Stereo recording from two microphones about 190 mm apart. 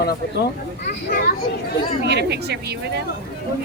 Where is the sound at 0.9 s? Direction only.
60° left (ahead or behind).